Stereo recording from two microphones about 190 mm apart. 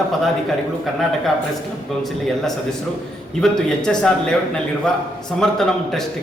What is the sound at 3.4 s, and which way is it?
Speech, 5° left (ahead or behind).